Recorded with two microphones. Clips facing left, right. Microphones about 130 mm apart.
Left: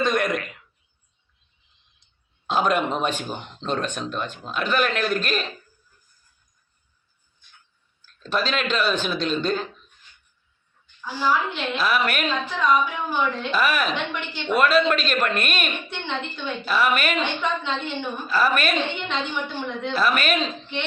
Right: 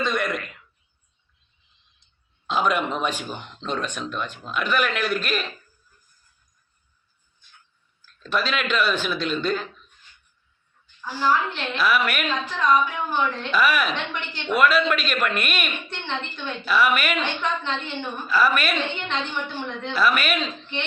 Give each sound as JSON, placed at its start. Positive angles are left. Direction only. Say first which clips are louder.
{"t": 0.0, "sound": "speech", "louder": "left 3 dB", "side_deg": 45}
{"t": 2.5, "sound": "a man's voice", "louder": "left 1 dB", "side_deg": 40}
{"t": 3.2, "sound": "a man's voice", "louder": "left 2 dB", "side_deg": 30}
{"t": 8.2, "sound": "a man's voice", "louder": "left 1 dB", "side_deg": 30}
{"t": 11.1, "sound": "a woman's voice", "louder": "right 1 dB", "side_deg": 5}
{"t": 11.8, "sound": "a man's voice", "louder": "right 1 dB", "side_deg": 35}
{"t": 12.5, "sound": "a woman's voice", "louder": "right 1 dB", "side_deg": 5}
{"t": 13.6, "sound": "a man's voice", "louder": "right 2 dB", "side_deg": 40}
{"t": 13.9, "sound": "a woman's voice", "louder": "left 2 dB", "side_deg": 5}
{"t": 14.5, "sound": "a man's voice", "louder": "left 1 dB", "side_deg": 35}
{"t": 15.9, "sound": "a woman's voice", "louder": "left 1 dB", "side_deg": 10}
{"t": 18.3, "sound": "a man's voice", "louder": "even", "side_deg": 35}
{"t": 18.9, "sound": "a woman's voice", "louder": "left 1 dB", "side_deg": 5}
{"t": 19.9, "sound": "a man's voice", "louder": "even", "side_deg": 35}